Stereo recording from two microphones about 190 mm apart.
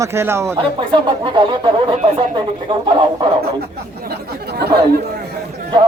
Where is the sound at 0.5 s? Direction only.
25° right (ahead or behind).